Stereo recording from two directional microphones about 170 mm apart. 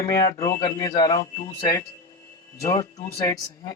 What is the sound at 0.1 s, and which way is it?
Speech, 20° left (ahead or behind).